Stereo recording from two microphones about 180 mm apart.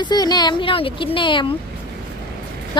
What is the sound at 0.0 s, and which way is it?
Speech, 25° left (ahead or behind).